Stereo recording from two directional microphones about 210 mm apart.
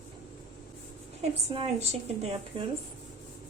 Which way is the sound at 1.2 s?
30° right (ahead or behind).